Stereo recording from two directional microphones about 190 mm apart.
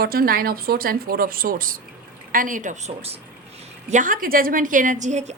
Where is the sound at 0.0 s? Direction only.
50° right (ahead or behind).